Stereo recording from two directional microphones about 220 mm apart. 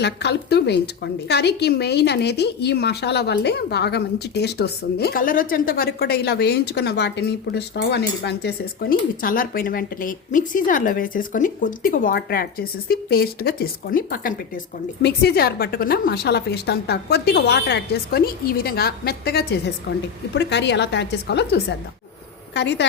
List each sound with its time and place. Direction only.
0.0 s a woman's voice: 50° left (ahead or behind)